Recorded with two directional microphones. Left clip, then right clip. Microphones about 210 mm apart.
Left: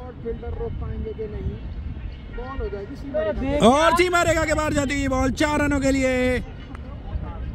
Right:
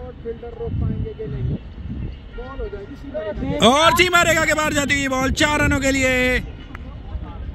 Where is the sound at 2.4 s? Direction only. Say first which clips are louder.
Even; 65° left (ahead or behind).